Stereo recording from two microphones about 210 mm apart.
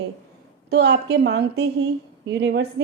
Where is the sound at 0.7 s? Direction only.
55° right (ahead or behind).